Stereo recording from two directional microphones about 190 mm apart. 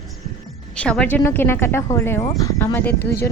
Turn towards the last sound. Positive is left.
turn(degrees=55)  # may be behind; listen again after turning